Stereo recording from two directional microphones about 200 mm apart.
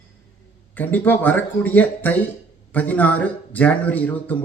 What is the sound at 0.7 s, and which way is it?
A man's voice, 10° left (ahead or behind).